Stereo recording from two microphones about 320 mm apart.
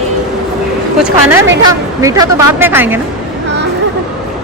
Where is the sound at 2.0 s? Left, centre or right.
Centre.